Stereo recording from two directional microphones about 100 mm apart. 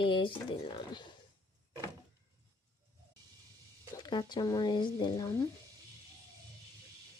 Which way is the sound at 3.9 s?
45° left (ahead or behind).